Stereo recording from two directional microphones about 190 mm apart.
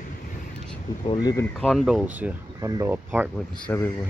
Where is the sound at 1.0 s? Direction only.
25° left (ahead or behind).